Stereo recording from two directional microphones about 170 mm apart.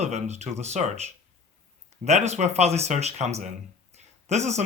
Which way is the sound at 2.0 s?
40° right (ahead or behind).